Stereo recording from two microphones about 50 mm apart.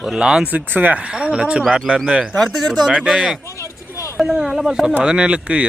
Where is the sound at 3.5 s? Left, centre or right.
Left.